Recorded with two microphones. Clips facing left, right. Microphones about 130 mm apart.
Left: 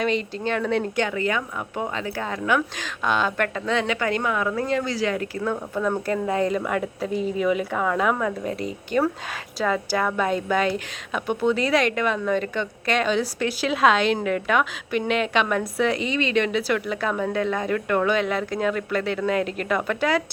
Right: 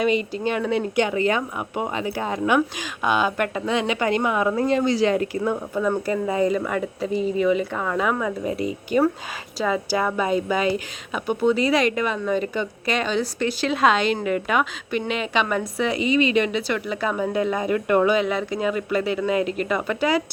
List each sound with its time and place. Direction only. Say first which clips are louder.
0.0 s speech: right 3 dB; 10° right (ahead or behind)
1.0 s a woman's voice: right 3 dB; 20° right (ahead or behind)
5.4 s a woman's voice: right 2 dB; 10° right (ahead or behind)